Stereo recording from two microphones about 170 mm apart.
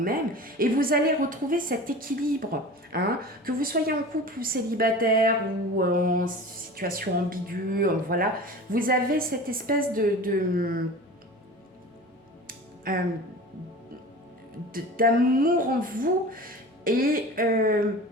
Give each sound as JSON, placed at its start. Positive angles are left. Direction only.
{"t": 0.0, "sound": "speech", "side_deg": -55}
{"t": 12.5, "sound": "music", "side_deg": -60}
{"t": 14.7, "sound": "speech", "side_deg": -55}